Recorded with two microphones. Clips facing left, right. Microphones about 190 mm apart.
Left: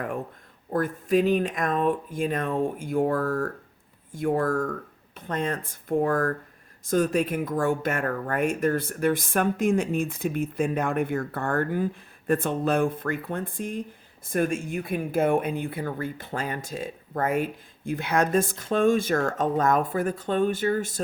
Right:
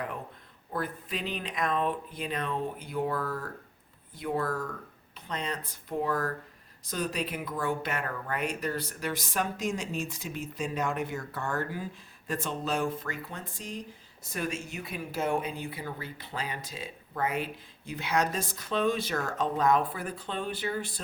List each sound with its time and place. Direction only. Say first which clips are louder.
0.7 s speech: left 11 dB; 45° left (ahead or behind)